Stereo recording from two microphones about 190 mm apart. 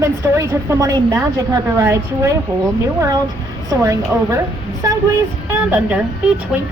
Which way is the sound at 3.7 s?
15° right (ahead or behind).